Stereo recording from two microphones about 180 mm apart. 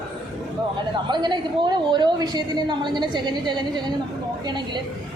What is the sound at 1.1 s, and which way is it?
A woman's voice, 25° right (ahead or behind).